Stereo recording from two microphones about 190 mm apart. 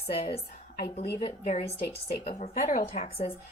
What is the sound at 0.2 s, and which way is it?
Speech, 30° left (ahead or behind).